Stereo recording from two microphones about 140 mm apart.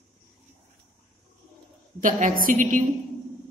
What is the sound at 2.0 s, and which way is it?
Speech, 80° right.